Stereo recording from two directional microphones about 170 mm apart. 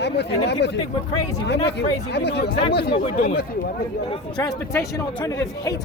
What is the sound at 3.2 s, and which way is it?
Speech, 60° left (ahead or behind).